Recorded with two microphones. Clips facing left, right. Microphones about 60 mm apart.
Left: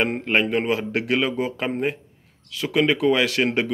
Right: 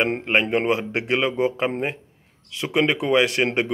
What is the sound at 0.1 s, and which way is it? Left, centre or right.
Speech, right.